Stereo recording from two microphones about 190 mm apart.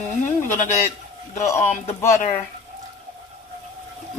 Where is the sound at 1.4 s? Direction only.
15° left (ahead or behind).